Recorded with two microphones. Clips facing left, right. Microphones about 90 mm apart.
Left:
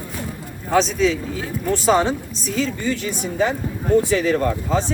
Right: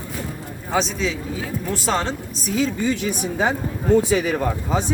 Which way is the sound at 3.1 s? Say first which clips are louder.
Even; 20° right (ahead or behind).